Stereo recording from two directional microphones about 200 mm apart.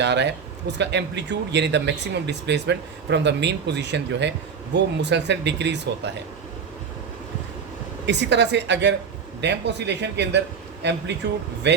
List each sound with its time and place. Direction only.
0.0 s speech: 60° right (ahead or behind)
8.0 s speech: 60° right (ahead or behind)